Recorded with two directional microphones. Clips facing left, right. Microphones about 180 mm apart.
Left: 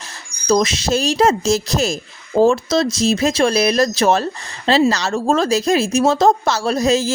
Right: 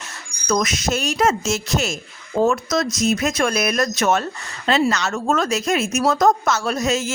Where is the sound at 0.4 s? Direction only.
30° left (ahead or behind).